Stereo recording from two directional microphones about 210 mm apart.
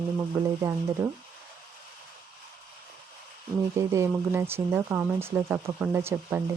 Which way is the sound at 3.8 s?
15° right (ahead or behind).